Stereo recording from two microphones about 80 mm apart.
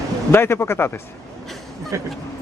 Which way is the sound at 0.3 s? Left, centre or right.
Left.